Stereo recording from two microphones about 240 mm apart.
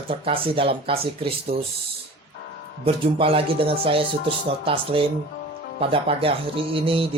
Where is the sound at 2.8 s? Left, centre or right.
Right.